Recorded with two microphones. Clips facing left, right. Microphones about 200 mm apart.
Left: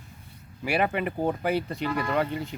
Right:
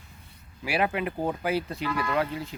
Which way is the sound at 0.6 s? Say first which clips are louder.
Left 1 dB; centre (ahead or behind).